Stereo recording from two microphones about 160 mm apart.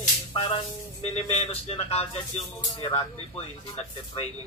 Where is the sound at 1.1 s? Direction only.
40° left (ahead or behind).